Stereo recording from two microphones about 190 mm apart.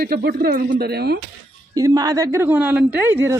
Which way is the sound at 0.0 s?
55° right (ahead or behind).